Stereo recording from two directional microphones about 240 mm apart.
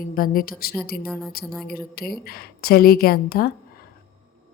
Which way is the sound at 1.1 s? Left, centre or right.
Centre.